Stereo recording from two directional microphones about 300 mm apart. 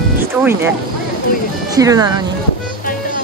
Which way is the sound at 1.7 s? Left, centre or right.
Centre.